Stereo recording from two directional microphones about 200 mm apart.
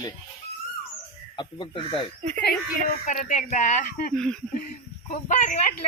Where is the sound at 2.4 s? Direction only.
40° left (ahead or behind).